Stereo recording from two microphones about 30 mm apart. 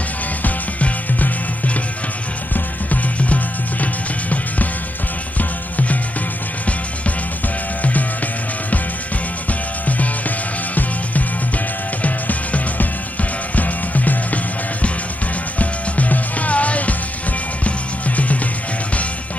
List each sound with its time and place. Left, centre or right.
0.4 s music: left
3.3 s music: left
9.5 s music: left